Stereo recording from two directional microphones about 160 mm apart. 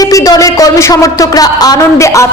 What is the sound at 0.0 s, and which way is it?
A man's voice, 20° left (ahead or behind).